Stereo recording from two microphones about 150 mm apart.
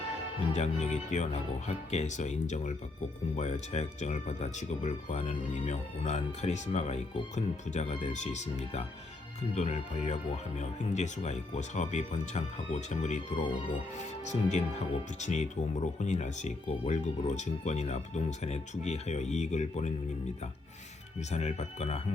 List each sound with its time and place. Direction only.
0.5 s speech: 50° left (ahead or behind)
14.3 s speech: 50° left (ahead or behind)
21.2 s speech: 50° left (ahead or behind)